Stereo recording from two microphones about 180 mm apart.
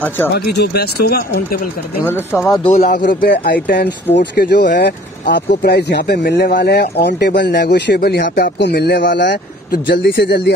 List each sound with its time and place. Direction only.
0.3 s speech: 65° left (ahead or behind)
2.0 s speech: 10° left (ahead or behind)
2.6 s speech: 40° left (ahead or behind); by 10.5 s 65° left (ahead or behind)